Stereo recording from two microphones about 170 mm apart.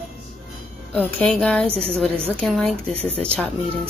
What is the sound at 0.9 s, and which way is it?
A woman's voice, 5° left (ahead or behind).